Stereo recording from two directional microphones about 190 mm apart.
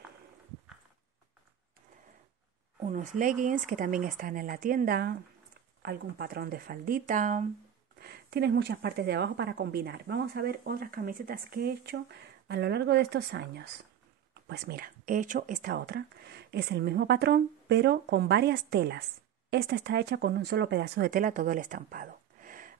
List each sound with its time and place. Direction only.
2.8 s speech: 40° right (ahead or behind)
8.0 s speech: 60° right (ahead or behind)